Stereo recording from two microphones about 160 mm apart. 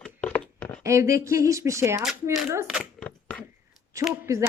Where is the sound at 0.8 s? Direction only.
20° right (ahead or behind).